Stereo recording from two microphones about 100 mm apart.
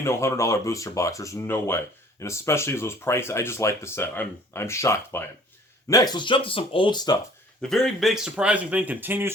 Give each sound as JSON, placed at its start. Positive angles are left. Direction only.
{"t": 0.0, "sound": "speech", "side_deg": 30}
{"t": 5.9, "sound": "speech", "side_deg": 40}
{"t": 7.6, "sound": "speech", "side_deg": 5}